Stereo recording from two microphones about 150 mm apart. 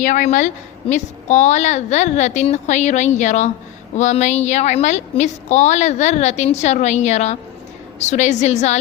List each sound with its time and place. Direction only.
0.0 s a woman's voice: 55° left (ahead or behind)